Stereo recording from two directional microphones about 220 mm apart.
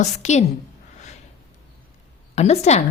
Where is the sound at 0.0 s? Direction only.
30° left (ahead or behind).